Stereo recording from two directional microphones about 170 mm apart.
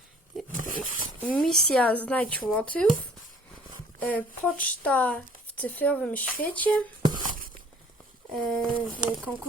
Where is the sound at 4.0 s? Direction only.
10° left (ahead or behind).